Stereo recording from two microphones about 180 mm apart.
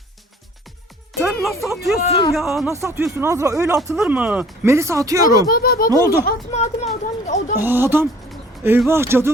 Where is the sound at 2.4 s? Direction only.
Centre (ahead or behind).